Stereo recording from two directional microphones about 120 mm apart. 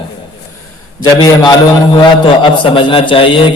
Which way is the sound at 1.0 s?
35° left (ahead or behind).